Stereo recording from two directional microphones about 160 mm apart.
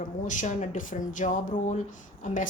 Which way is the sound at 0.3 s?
50° left (ahead or behind).